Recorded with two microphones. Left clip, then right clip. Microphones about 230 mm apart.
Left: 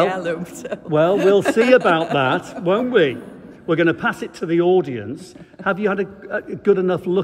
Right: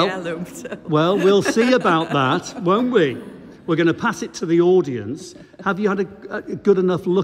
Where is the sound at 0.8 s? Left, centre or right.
Centre.